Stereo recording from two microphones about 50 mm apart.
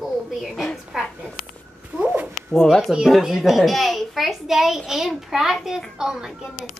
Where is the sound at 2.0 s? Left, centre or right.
Right.